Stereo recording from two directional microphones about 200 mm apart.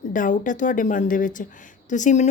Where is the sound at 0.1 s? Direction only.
40° left (ahead or behind).